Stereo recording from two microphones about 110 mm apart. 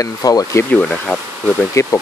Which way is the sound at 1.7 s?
25° left (ahead or behind).